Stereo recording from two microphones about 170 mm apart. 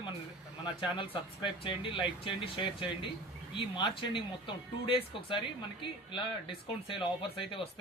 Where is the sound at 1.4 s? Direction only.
30° left (ahead or behind).